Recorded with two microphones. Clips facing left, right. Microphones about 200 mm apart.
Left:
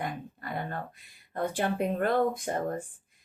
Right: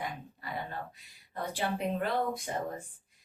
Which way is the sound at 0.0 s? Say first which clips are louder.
Left 4 dB; 50° left (ahead or behind).